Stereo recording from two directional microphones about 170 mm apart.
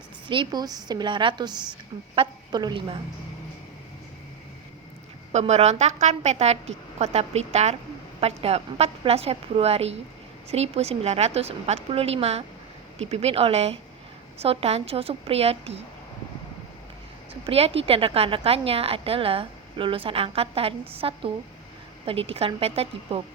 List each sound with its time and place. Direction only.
0.3 s a woman's voice: 25° right (ahead or behind)
5.3 s a woman's voice: 40° right (ahead or behind)
17.4 s a woman's voice: 35° right (ahead or behind)